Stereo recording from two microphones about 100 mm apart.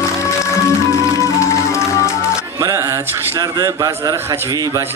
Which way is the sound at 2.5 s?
30° right (ahead or behind).